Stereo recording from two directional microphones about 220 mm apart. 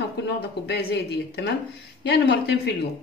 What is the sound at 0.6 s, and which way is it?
Speech, 50° left (ahead or behind).